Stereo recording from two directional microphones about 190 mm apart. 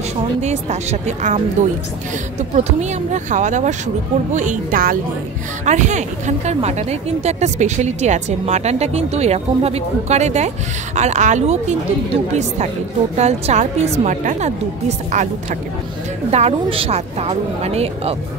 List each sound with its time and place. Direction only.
0.4 s speech: 35° right (ahead or behind)
2.5 s speech: 40° right (ahead or behind)
13.1 s speech: 35° right (ahead or behind)
16.3 s speech: 35° right (ahead or behind)